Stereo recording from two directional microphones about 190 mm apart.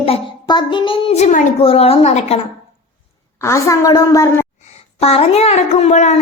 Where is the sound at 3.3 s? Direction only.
15° left (ahead or behind).